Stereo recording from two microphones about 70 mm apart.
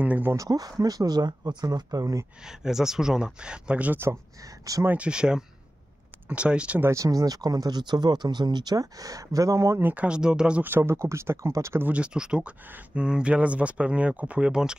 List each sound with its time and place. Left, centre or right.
0.0 s speech: right
0.4 s speech: right
2.4 s speech: centre
6.8 s speech: right
7.1 s speech: right
9.9 s speech: centre
10.6 s speech: right
11.8 s speech: centre